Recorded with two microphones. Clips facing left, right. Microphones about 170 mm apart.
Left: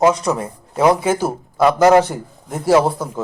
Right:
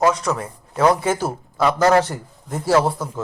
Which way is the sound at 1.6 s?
15° left (ahead or behind).